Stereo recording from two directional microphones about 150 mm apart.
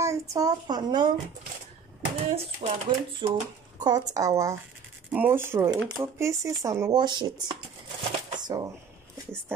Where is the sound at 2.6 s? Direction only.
40° right (ahead or behind); by 4.5 s 20° right (ahead or behind).